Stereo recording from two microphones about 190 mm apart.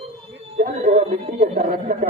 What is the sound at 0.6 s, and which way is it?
Speech, 50° right (ahead or behind).